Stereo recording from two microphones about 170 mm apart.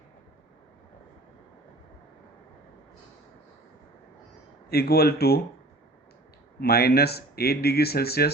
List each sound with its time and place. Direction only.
4.7 s speech: 65° left (ahead or behind)
6.6 s speech: 65° left (ahead or behind)